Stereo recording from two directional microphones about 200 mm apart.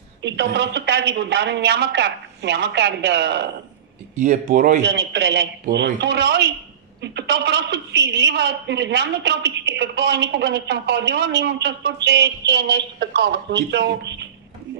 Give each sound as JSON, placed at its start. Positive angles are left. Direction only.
{"t": 0.2, "sound": "a woman's voice", "side_deg": -60}
{"t": 4.1, "sound": "speech", "side_deg": -40}
{"t": 4.8, "sound": "a woman's voice", "side_deg": -60}